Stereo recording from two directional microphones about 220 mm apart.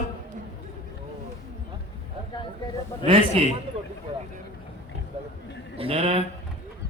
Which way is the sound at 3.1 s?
25° right (ahead or behind).